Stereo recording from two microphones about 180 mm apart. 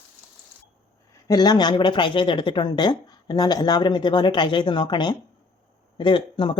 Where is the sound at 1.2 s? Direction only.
20° left (ahead or behind).